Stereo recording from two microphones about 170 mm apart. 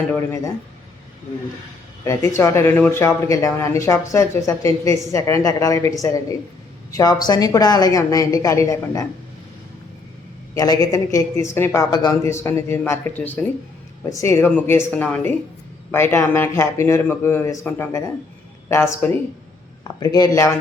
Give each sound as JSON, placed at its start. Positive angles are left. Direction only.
{"t": 2.0, "sound": "speech", "side_deg": 15}
{"t": 10.5, "sound": "speech", "side_deg": 20}